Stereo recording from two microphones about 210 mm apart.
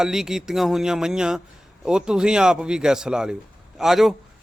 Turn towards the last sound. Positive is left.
turn(degrees=0)  # may be behind; listen again after turning